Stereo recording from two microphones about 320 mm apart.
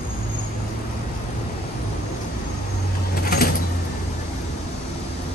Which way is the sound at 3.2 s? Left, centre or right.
Left.